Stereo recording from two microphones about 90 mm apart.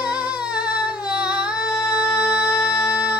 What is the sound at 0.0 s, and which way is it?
Singing, 15° right (ahead or behind).